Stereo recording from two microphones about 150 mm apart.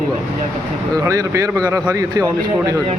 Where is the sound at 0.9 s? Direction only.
20° right (ahead or behind).